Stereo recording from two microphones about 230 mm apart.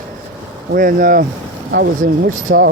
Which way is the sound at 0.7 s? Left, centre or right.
Right.